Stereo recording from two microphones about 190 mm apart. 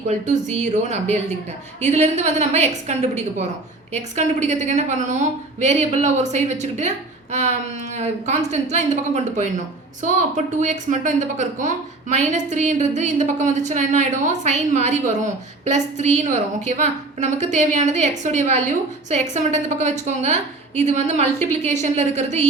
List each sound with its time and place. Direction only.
0.3 s a woman's voice: 40° right (ahead or behind)